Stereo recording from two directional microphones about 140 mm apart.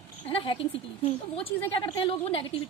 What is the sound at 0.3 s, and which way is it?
A woman's voice, 40° left (ahead or behind).